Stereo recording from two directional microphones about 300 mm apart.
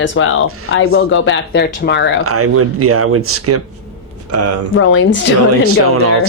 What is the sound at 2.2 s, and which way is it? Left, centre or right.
Speech, right.